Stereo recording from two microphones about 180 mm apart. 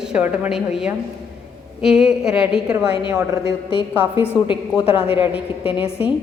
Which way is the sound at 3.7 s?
30° left (ahead or behind).